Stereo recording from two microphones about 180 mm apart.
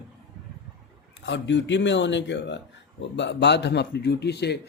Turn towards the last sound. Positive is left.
turn(degrees=70)  # may be behind; listen again after turning